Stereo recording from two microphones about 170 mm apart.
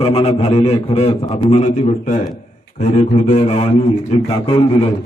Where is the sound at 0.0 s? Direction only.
35° left (ahead or behind).